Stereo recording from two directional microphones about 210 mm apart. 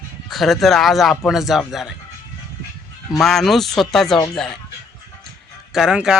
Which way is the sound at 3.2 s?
Centre (ahead or behind).